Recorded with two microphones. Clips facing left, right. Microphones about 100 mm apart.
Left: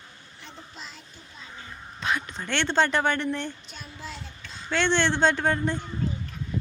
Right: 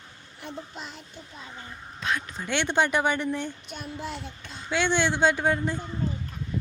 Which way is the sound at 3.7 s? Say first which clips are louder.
Right 5 dB; 60° right (ahead or behind).